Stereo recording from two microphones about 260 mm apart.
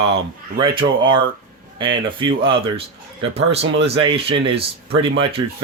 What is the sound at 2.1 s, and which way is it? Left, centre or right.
Speech, centre.